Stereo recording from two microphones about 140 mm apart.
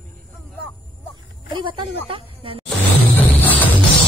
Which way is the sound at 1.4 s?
35° right (ahead or behind).